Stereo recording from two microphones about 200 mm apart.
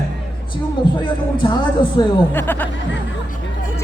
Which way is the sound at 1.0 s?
20° left (ahead or behind).